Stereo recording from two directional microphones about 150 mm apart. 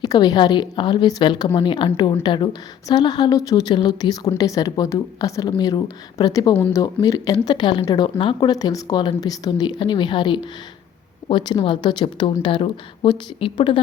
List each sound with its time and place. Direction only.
0.0 s speech: 25° left (ahead or behind)
6.6 s speech: 15° left (ahead or behind); by 13.8 s 35° left (ahead or behind)